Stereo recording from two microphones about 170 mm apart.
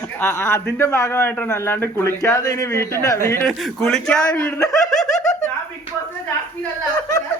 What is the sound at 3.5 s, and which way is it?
A man's voice, centre (ahead or behind).